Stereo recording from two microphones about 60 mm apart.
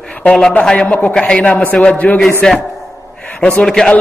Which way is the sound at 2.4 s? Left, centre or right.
Centre.